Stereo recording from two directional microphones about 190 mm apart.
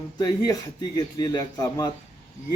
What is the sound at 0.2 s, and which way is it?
A man's voice, 20° left (ahead or behind).